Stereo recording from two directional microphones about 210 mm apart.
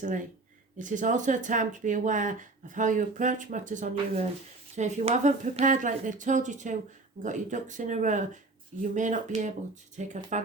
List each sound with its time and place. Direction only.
0.8 s speech: 35° right (ahead or behind)